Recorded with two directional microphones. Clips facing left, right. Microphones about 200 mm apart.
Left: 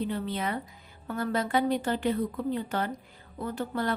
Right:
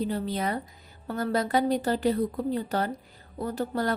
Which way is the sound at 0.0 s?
40° right (ahead or behind).